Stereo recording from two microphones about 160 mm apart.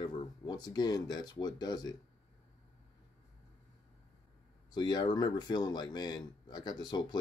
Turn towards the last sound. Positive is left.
turn(degrees=25)  # may be behind; listen again after turning